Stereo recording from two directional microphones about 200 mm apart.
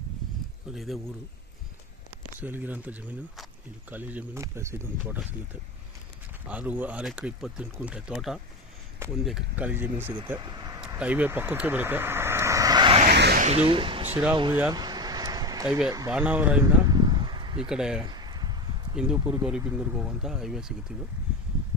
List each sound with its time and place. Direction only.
0.7 s speech: centre (ahead or behind)
2.4 s speech: 10° right (ahead or behind)
6.4 s speech: 5° right (ahead or behind)
10.8 s vehicle: 5° right (ahead or behind); by 13.0 s 20° right (ahead or behind)
13.1 s speech: 55° right (ahead or behind)
13.7 s speech: 25° right (ahead or behind)
14.5 s a sound: 15° right (ahead or behind)
16.1 s speech: 5° right (ahead or behind)
16.8 s a sound: 20° right (ahead or behind)
17.6 s speech: 5° right (ahead or behind)
18.0 s a sound: 20° right (ahead or behind)
19.1 s speech: 10° right (ahead or behind)